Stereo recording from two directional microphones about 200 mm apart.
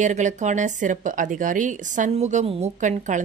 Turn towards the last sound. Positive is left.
turn(degrees=-40)  # may be behind; listen again after turning